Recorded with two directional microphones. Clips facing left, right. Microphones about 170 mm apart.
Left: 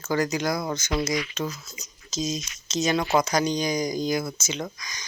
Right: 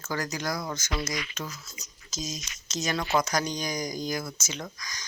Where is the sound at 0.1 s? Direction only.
20° left (ahead or behind).